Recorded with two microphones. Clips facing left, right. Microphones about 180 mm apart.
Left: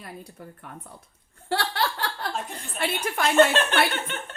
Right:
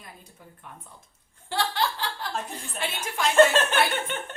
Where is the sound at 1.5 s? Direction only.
65° left (ahead or behind).